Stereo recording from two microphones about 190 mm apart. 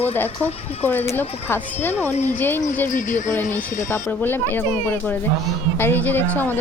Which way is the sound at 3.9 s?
10° left (ahead or behind).